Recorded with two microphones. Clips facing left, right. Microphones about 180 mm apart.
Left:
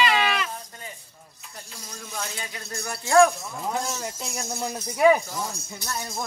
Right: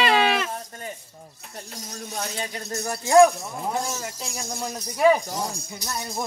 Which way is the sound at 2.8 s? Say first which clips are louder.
Right 3 dB; 20° right (ahead or behind).